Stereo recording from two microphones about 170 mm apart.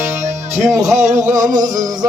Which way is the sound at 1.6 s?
25° right (ahead or behind).